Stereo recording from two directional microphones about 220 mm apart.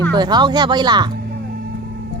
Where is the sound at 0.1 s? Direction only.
20° right (ahead or behind).